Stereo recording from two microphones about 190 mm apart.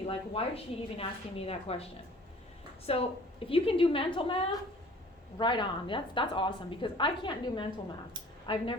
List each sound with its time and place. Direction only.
0.1 s a woman's voice: 30° left (ahead or behind)